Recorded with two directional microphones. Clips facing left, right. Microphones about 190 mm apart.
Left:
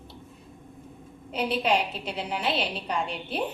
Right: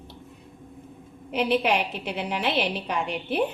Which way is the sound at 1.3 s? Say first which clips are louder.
Right 3 dB; 65° right (ahead or behind).